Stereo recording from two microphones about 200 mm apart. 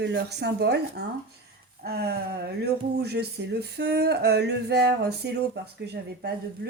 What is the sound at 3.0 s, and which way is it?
Speech, 55° right (ahead or behind).